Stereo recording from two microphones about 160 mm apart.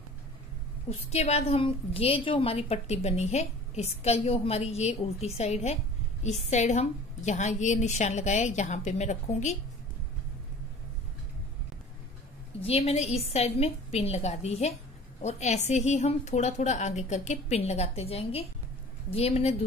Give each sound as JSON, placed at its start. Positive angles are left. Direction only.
{"t": 0.8, "sound": "a woman's voice", "side_deg": 40}
{"t": 12.5, "sound": "a woman's voice", "side_deg": 40}